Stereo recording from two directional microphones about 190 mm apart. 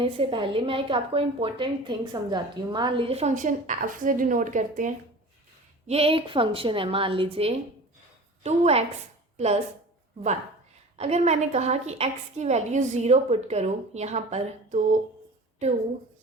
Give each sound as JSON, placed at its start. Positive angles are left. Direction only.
{"t": 0.0, "sound": "a woman's voice", "side_deg": -30}
{"t": 5.9, "sound": "a woman's voice", "side_deg": -30}
{"t": 10.9, "sound": "a woman's voice", "side_deg": -35}